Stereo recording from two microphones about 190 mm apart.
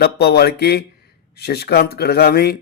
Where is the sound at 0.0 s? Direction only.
55° left (ahead or behind).